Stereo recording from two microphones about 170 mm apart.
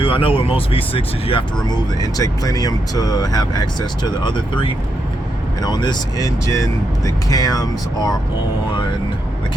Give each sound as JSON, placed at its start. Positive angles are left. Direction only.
{"t": 0.0, "sound": "speech", "side_deg": 30}
{"t": 1.7, "sound": "speech", "side_deg": 20}